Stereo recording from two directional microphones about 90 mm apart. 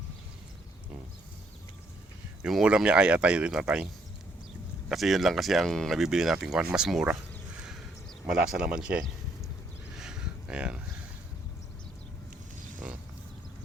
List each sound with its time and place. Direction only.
2.4 s speech: 10° right (ahead or behind)
4.9 s speech: 5° right (ahead or behind)
8.3 s speech: 5° right (ahead or behind)
10.0 s a sound: 5° right (ahead or behind)
12.8 s speech: 15° right (ahead or behind)